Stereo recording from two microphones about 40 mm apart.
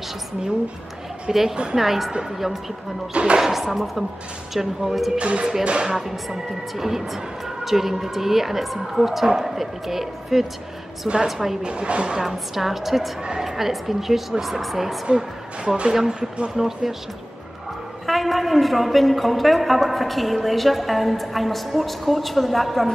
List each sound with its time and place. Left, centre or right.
1.3 s a woman's voice: centre
3.1 s a woman's voice: right
3.3 s a woman's voice: centre
5.1 s a woman's voice: right
5.9 s speech: centre
11.6 s a woman's voice: right
12.2 s a woman's voice: centre
15.1 s speech: centre
18.0 s a woman's voice: centre